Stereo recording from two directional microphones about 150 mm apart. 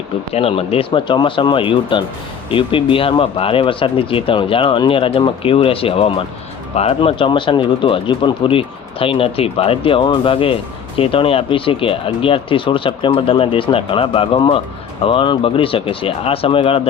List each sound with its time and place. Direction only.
0.3 s speech: 40° left (ahead or behind)